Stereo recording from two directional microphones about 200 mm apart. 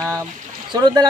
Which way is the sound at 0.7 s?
20° right (ahead or behind).